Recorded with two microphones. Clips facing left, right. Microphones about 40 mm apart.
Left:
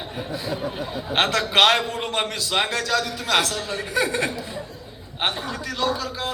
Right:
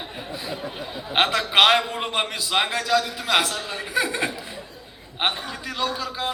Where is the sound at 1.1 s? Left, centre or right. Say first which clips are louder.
Even; centre.